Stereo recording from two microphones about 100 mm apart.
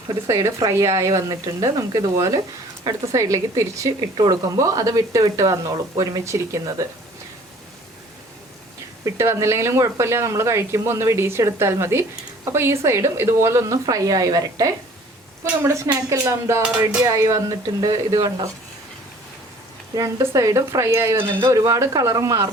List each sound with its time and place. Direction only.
0.3 s speech: 30° right (ahead or behind)
9.0 s speech: 25° right (ahead or behind)
20.0 s speech: 35° right (ahead or behind)